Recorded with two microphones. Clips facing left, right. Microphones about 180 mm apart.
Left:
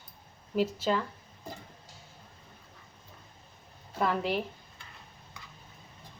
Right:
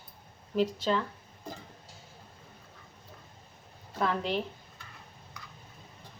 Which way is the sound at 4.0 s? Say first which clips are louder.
Left 1 dB; 5° left (ahead or behind).